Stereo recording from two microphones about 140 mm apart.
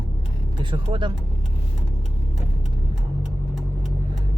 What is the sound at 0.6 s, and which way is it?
Speech, 35° right (ahead or behind).